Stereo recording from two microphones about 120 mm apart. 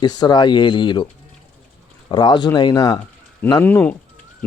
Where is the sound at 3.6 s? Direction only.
15° left (ahead or behind).